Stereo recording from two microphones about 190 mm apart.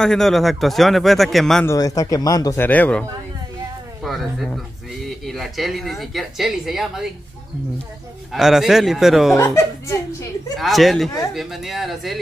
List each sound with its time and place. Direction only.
0.0 s speech: centre (ahead or behind)
1.7 s speech: 15° left (ahead or behind); by 7.1 s centre (ahead or behind)
8.3 s speech: centre (ahead or behind)
9.4 s speech: 15° left (ahead or behind)
10.6 s speech: centre (ahead or behind)